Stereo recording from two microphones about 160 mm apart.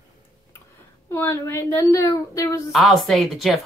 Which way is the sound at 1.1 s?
15° left (ahead or behind).